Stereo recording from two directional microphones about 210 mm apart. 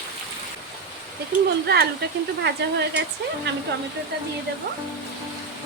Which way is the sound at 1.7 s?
50° right (ahead or behind).